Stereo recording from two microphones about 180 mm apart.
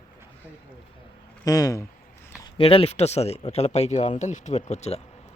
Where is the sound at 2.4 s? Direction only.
30° left (ahead or behind).